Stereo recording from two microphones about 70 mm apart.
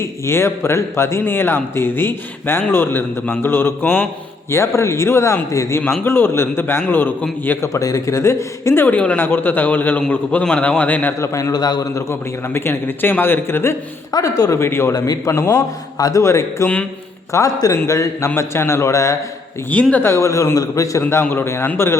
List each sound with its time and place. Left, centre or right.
0.0 s speech: left
4.5 s speech: left
5.8 s speech: left
7.7 s a man's voice: left
11.2 s speech: left
11.5 s a man's voice: left
12.5 s speech: left
14.1 s a man's voice: left
14.5 s speech: left
14.9 s a man's voice: left
15.3 s a man's voice: left
16.2 s speech: left
19.9 s speech: left
21.0 s speech: left